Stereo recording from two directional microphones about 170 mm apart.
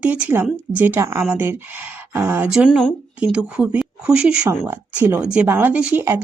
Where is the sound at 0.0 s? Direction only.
10° right (ahead or behind).